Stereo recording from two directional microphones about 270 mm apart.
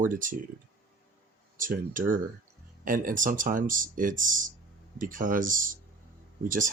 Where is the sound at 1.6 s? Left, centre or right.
Right.